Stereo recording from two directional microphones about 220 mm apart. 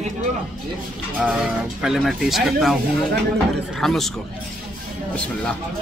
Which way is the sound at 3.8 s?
Centre (ahead or behind).